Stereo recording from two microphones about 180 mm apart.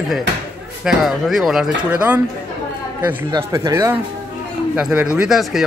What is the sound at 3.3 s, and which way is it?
Speech, 20° right (ahead or behind).